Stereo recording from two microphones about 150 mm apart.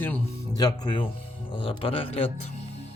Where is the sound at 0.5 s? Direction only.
25° left (ahead or behind).